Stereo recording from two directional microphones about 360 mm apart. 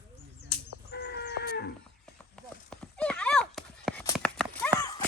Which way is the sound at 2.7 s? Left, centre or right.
Centre.